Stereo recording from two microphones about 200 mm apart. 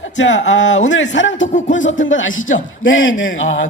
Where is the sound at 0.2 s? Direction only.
65° left (ahead or behind).